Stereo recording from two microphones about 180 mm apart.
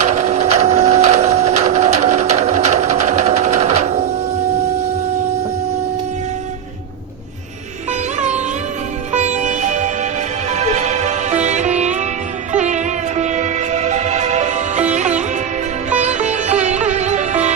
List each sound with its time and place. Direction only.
0.0 s printer: 40° right (ahead or behind)
9.1 s music: 40° right (ahead or behind)
16.0 s sitar: 40° right (ahead or behind)